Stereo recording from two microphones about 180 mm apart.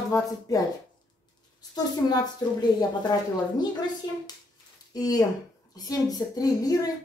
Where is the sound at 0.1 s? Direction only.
20° left (ahead or behind).